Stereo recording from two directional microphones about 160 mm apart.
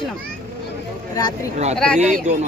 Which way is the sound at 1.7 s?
5° left (ahead or behind).